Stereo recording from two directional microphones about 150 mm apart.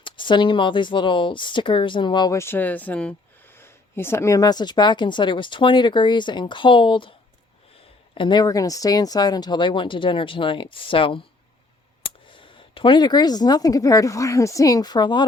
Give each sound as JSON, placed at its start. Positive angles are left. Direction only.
{"t": 0.0, "sound": "speech", "side_deg": 30}
{"t": 8.1, "sound": "speech", "side_deg": 30}